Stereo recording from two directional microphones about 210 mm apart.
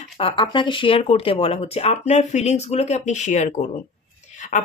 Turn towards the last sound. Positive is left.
turn(degrees=35)  # may be behind; listen again after turning